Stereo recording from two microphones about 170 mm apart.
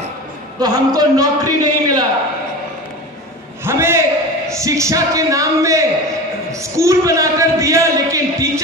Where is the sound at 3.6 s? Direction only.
15° right (ahead or behind).